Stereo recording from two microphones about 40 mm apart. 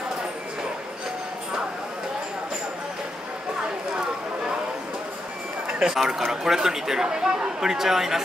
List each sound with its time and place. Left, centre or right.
5.9 s speech: centre